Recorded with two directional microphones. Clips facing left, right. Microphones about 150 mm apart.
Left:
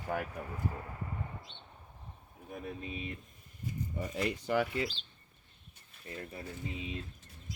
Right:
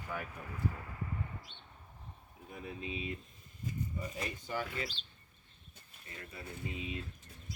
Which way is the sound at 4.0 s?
75° left (ahead or behind).